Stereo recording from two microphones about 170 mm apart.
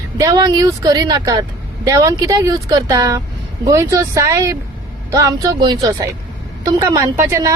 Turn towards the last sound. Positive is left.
turn(degrees=-20)  # may be behind; listen again after turning